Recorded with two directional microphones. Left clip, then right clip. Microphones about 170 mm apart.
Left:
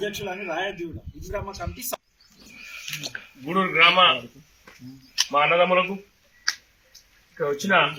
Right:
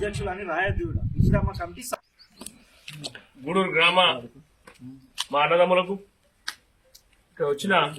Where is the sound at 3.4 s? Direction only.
15° right (ahead or behind).